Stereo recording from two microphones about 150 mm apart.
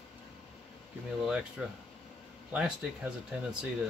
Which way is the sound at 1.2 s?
5° right (ahead or behind).